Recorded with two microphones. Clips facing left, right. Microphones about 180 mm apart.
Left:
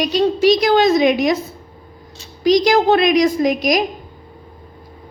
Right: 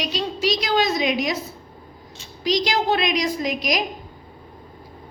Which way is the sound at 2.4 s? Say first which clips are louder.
Left 8 dB; 50° left (ahead or behind).